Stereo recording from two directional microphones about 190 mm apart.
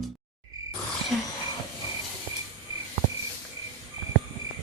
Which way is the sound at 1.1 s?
5° left (ahead or behind).